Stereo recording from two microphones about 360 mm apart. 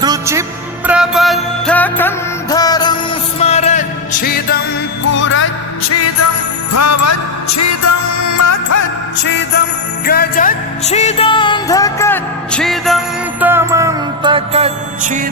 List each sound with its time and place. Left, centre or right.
0.0 s music: centre; by 8.9 s left
9.2 s music: left; by 15.3 s right